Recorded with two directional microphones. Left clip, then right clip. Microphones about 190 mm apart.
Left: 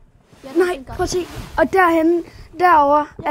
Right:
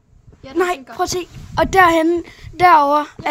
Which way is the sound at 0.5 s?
20° right (ahead or behind).